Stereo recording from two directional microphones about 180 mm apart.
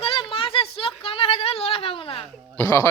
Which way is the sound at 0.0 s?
30° left (ahead or behind).